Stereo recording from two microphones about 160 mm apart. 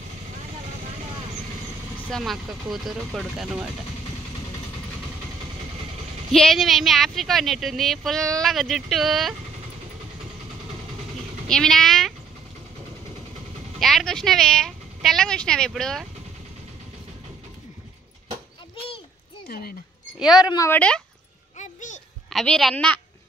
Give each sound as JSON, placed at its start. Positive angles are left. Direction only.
{"t": 2.0, "sound": "speech", "side_deg": 0}
{"t": 6.3, "sound": "speech", "side_deg": 0}
{"t": 11.4, "sound": "speech", "side_deg": 5}
{"t": 13.7, "sound": "speech", "side_deg": 0}
{"t": 19.4, "sound": "a sound", "side_deg": 70}
{"t": 20.2, "sound": "speech", "side_deg": -5}
{"t": 20.4, "sound": "speech", "side_deg": 25}
{"t": 20.7, "sound": "speech", "side_deg": 5}
{"t": 21.5, "sound": "a sound", "side_deg": 50}
{"t": 22.3, "sound": "speech", "side_deg": 0}